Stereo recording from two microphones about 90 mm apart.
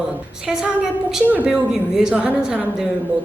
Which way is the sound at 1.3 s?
10° right (ahead or behind).